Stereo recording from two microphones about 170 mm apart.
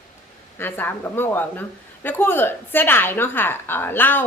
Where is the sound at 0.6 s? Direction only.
10° left (ahead or behind).